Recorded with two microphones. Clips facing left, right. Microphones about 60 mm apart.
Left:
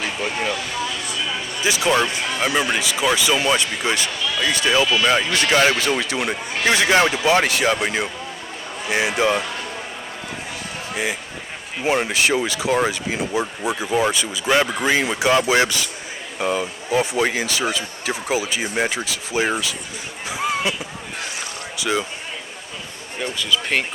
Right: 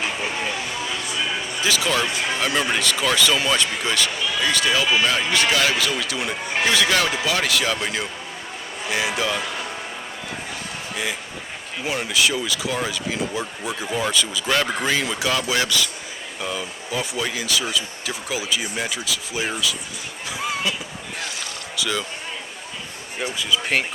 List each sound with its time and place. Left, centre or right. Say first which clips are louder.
0.3 s vehicle: left 3 dB; left
1.0 s a sound: right 1 dB; right
1.6 s speech: left 4 dB; left
2.4 s speech: left 3 dB; centre
10.9 s speech: left 3 dB; left
11.9 s speech: left 4 dB; left
20.2 s a sound: left 3 dB; left
21.8 s speech: left 3 dB; left
23.2 s speech: left 1 dB; centre